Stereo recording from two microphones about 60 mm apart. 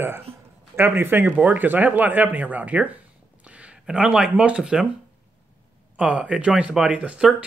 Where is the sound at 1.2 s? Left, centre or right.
Right.